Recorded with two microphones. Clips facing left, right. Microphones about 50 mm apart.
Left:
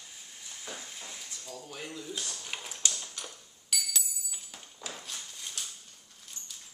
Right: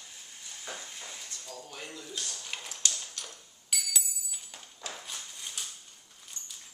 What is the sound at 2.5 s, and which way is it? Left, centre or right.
Ping, centre.